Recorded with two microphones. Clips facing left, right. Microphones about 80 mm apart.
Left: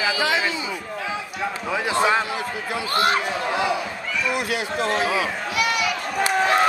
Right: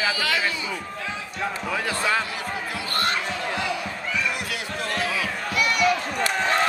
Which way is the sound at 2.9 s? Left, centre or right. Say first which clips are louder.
Left 5 dB; centre.